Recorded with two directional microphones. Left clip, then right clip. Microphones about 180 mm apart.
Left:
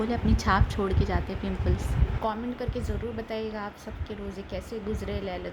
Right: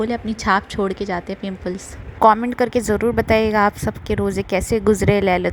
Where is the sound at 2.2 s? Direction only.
65° right (ahead or behind).